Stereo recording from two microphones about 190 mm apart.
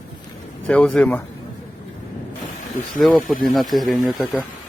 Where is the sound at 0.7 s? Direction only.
5° left (ahead or behind).